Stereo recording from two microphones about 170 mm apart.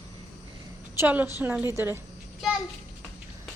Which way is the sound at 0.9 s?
10° right (ahead or behind).